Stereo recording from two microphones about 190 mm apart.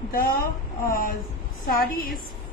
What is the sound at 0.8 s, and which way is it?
A woman's voice, 45° left (ahead or behind).